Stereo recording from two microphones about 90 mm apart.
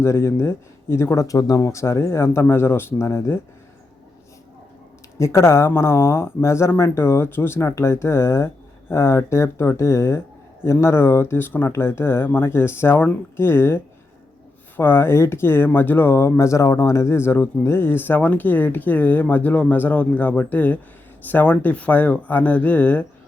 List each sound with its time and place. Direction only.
0.0 s speech: 30° left (ahead or behind)
5.1 s speech: 30° left (ahead or behind)